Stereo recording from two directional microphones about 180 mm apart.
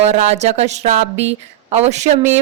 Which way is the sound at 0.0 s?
40° right (ahead or behind).